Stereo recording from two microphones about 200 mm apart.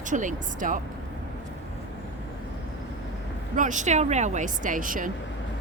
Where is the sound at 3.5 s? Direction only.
40° right (ahead or behind).